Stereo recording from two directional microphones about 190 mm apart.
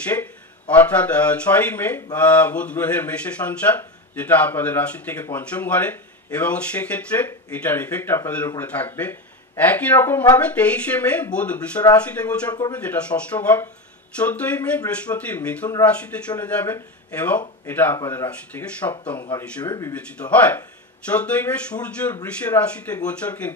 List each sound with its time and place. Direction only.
0.1 s speech: 10° left (ahead or behind)
19.3 s speech: 20° left (ahead or behind)
19.9 s speech: 10° left (ahead or behind)